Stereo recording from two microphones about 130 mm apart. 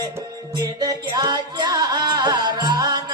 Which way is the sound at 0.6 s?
30° right (ahead or behind).